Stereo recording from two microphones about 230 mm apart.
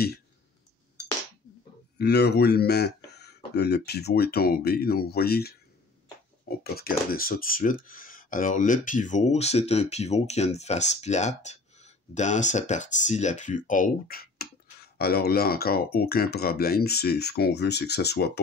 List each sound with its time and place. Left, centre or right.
2.0 s speech: left
6.6 s speech: left